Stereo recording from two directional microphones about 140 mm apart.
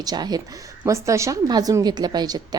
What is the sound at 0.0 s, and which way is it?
A woman's voice, 30° right (ahead or behind).